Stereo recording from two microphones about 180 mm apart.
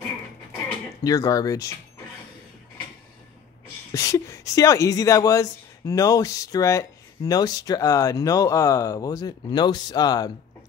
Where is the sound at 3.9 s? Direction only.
20° left (ahead or behind).